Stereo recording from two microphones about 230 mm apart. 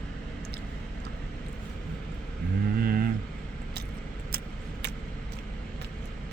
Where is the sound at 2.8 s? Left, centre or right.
Right.